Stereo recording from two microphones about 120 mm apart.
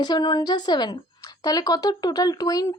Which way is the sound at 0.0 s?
35° left (ahead or behind).